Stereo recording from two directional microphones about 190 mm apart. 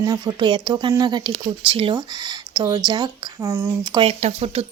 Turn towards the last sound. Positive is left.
turn(degrees=-30)  # may be behind; listen again after turning